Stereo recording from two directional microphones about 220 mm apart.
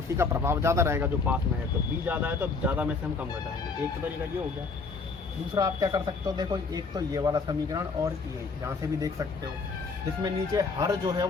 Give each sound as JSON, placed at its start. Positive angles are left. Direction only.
{"t": 0.2, "sound": "a man's voice", "side_deg": -10}
{"t": 5.5, "sound": "a man's voice", "side_deg": -15}
{"t": 10.2, "sound": "a man's voice", "side_deg": -15}